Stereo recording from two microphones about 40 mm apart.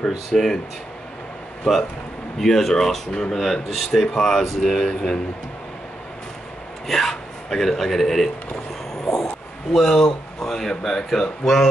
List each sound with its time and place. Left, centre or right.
0.3 s speech: centre
2.4 s speech: centre
6.9 s speech: centre
9.0 s a sound: centre
9.9 s speech: centre